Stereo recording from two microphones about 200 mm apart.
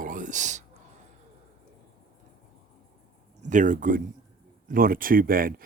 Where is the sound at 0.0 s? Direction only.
40° right (ahead or behind).